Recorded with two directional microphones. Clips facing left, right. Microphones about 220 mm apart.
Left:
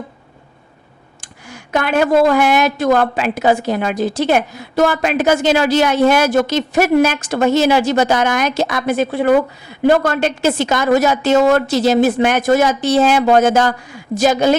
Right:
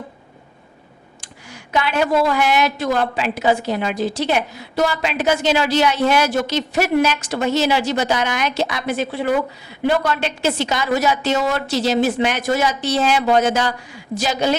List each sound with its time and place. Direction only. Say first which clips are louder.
1.2 s speech: left 4 dB; 50° left (ahead or behind)